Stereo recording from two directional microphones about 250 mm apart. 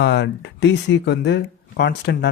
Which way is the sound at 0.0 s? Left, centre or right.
Left.